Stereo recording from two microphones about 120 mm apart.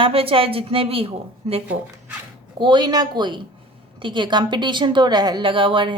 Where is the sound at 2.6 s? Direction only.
40° right (ahead or behind).